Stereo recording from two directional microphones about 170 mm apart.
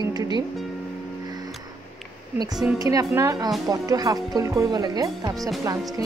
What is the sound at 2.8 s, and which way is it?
A woman's voice, 20° right (ahead or behind).